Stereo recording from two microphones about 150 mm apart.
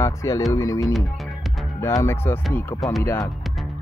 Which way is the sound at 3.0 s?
20° left (ahead or behind).